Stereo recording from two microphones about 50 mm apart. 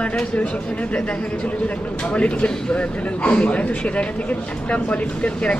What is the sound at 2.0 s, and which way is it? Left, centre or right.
A man's voice, left.